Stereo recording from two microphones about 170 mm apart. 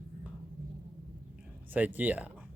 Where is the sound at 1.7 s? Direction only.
10° right (ahead or behind).